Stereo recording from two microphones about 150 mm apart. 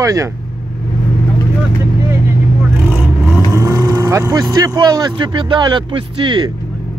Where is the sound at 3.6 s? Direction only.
25° right (ahead or behind).